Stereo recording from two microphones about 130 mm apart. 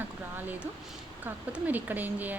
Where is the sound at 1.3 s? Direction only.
15° right (ahead or behind).